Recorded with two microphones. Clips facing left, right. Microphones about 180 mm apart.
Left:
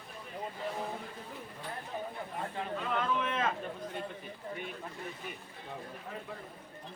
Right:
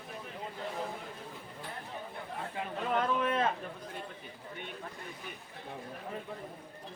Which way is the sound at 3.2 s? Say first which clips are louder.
Right 3 dB; 35° right (ahead or behind).